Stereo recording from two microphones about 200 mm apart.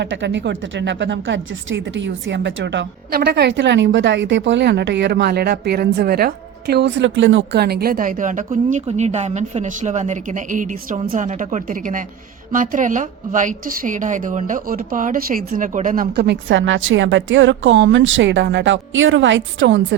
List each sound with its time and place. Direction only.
0.0 s a woman's voice: 60° right (ahead or behind)